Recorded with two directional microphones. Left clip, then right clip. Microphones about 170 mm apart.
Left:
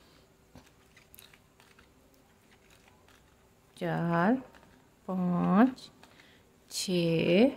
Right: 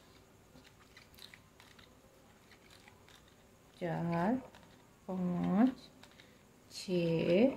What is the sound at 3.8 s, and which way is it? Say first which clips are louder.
Speech: left 7 dB; 40° left (ahead or behind).